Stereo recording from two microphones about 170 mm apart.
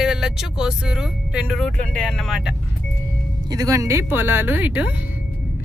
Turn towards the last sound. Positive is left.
turn(degrees=-10)  # may be behind; listen again after turning